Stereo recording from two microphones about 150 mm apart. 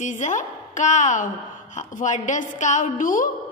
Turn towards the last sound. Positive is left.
turn(degrees=65)  # may be behind; listen again after turning